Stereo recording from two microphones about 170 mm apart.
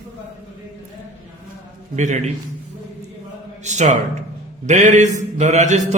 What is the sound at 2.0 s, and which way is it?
Mantra, 45° right (ahead or behind).